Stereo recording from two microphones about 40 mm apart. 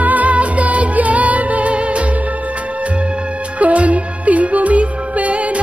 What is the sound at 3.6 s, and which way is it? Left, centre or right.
Music, right.